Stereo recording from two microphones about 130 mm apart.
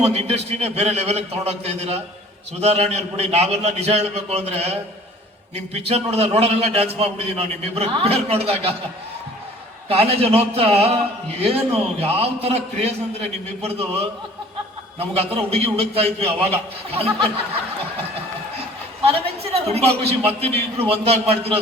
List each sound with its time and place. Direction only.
0.0 s a man's voice: 55° right (ahead or behind)
9.9 s a man's voice: 50° right (ahead or behind)
14.9 s a man's voice: 50° right (ahead or behind)
19.0 s a man's voice: 50° right (ahead or behind)